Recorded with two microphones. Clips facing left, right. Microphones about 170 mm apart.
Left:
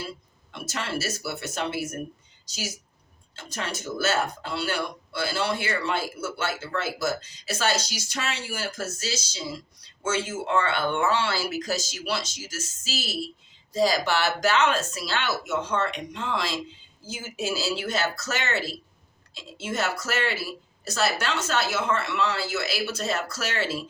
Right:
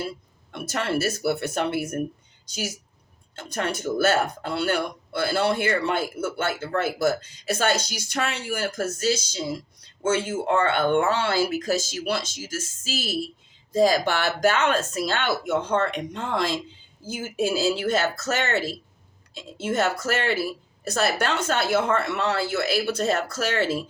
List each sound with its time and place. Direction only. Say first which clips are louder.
0.5 s speech: right 5 dB; 55° right (ahead or behind)